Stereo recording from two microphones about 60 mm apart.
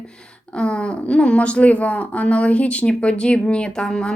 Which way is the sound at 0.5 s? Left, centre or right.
Centre.